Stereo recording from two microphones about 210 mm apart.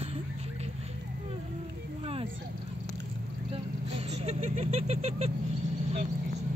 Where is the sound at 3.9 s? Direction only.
30° right (ahead or behind).